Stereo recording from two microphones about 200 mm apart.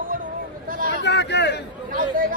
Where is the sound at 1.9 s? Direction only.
45° right (ahead or behind).